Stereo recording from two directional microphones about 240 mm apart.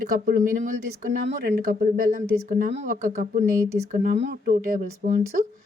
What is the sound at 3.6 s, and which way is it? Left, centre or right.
Speech, centre.